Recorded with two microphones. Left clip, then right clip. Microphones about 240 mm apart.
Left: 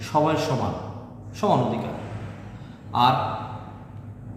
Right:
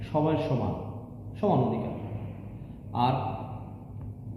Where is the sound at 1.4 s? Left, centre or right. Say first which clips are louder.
Left 5 dB; centre.